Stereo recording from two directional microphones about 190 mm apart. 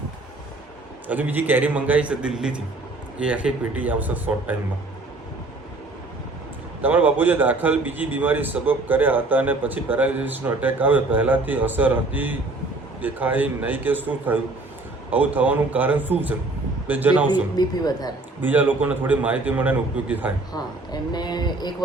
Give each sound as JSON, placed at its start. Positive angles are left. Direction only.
{"t": 1.0, "sound": "a man's voice", "side_deg": -10}
{"t": 6.8, "sound": "a man's voice", "side_deg": -10}
{"t": 17.2, "sound": "speech", "side_deg": 20}
{"t": 18.4, "sound": "a man's voice", "side_deg": -10}
{"t": 20.5, "sound": "speech", "side_deg": 20}